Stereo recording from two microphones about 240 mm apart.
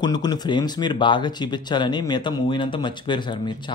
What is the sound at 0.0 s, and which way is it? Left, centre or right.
Speech, centre.